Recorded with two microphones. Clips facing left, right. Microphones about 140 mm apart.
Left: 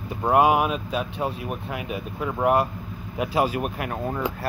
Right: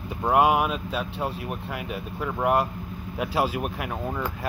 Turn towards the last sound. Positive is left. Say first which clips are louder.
# left 2 dB
turn(degrees=5)  # may be behind; listen again after turning